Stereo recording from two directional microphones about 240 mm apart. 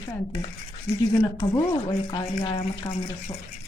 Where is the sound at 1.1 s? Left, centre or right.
Centre.